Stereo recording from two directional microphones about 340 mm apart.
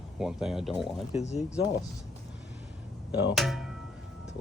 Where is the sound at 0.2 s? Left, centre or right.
Centre.